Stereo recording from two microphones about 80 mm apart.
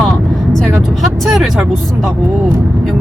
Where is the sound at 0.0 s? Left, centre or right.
Centre.